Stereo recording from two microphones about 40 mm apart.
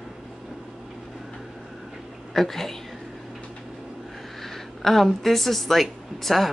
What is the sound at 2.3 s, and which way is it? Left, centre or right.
Speech, centre.